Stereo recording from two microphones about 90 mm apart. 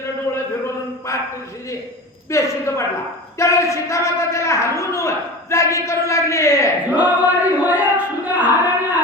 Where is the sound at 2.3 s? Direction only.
35° left (ahead or behind).